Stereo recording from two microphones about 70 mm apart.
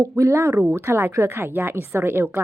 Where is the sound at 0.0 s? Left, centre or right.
Right.